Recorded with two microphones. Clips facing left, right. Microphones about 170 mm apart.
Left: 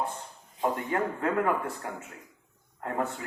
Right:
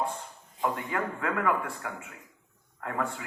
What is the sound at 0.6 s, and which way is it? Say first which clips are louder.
Speech: left 2 dB; 30° left (ahead or behind).